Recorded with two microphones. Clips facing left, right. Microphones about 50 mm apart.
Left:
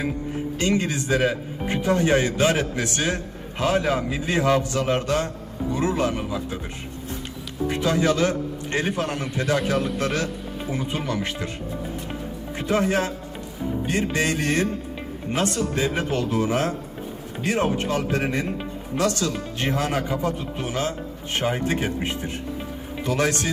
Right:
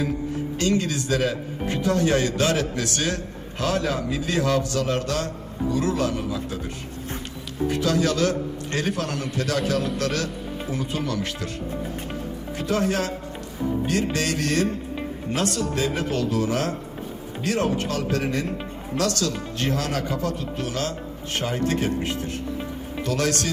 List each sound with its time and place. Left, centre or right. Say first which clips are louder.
0.6 s a man's voice: even; left
7.7 s a man's voice: left 1 dB; left
12.5 s a man's voice: left 2 dB; left